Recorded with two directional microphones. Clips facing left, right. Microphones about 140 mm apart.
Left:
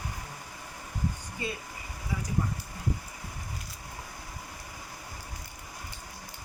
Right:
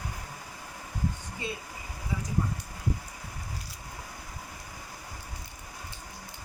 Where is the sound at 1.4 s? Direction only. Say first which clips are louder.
Left 1 dB; 25° right (ahead or behind).